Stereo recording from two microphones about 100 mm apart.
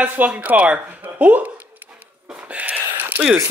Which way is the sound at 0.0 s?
15° right (ahead or behind).